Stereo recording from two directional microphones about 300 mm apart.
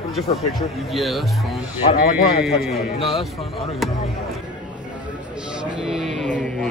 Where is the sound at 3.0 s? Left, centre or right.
Centre.